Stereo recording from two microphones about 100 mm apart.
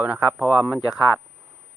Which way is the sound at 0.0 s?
15° right (ahead or behind).